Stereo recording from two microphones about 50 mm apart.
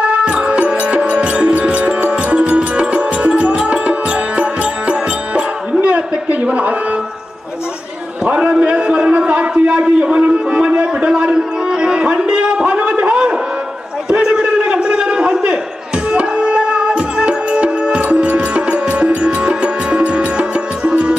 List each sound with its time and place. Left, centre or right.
0.0 s music: centre
8.3 s a sound: centre
16.1 s music: centre